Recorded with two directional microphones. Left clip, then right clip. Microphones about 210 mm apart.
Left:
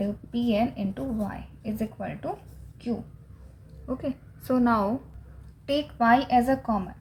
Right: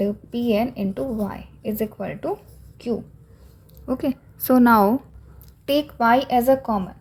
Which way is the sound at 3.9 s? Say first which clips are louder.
Right 7 dB; 50° right (ahead or behind).